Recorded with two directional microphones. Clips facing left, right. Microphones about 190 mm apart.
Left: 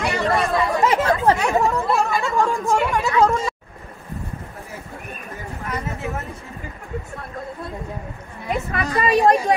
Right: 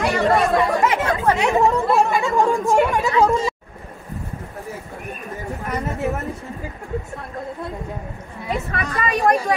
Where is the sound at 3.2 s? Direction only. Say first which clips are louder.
Right 1 dB; centre (ahead or behind).